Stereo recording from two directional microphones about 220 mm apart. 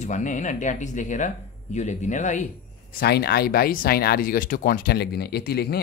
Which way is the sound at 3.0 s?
45° left (ahead or behind).